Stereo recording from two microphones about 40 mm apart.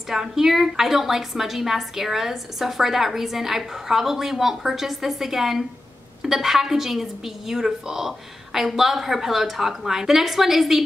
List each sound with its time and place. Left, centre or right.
0.1 s a woman's voice: centre